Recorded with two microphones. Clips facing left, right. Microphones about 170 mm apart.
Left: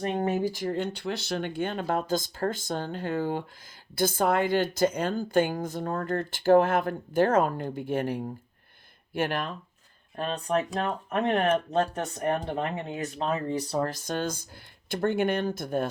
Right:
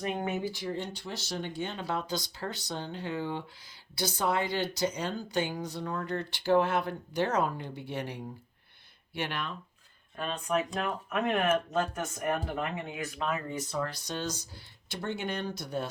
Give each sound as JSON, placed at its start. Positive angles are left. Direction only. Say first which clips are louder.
{"t": 0.2, "sound": "speech", "louder": "left 6 dB", "side_deg": 35}
{"t": 10.2, "sound": "speech", "louder": "left 3 dB", "side_deg": 35}